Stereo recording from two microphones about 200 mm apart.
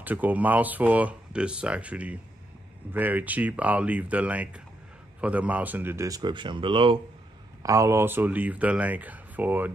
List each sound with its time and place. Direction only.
0.0 s speech: 10° right (ahead or behind); by 7.0 s 25° right (ahead or behind)
7.6 s speech: 15° right (ahead or behind)